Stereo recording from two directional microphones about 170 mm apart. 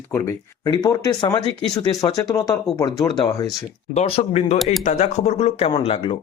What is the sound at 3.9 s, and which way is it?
Speech, 40° left (ahead or behind).